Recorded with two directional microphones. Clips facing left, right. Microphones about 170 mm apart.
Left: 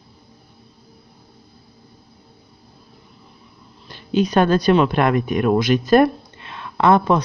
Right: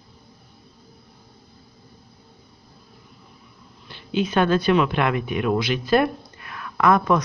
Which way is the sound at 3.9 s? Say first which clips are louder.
Left 5 dB; 40° left (ahead or behind).